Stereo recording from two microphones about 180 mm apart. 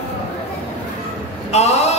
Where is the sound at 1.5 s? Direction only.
35° left (ahead or behind).